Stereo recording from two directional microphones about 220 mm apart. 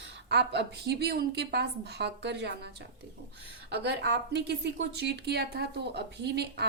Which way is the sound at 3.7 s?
50° right (ahead or behind).